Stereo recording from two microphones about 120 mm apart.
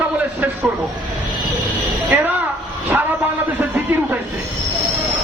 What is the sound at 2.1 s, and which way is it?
Speech, 15° right (ahead or behind).